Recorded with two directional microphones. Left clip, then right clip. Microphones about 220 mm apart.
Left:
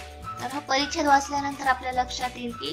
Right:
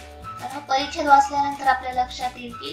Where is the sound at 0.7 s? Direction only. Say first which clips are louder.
Right 4 dB; 30° left (ahead or behind).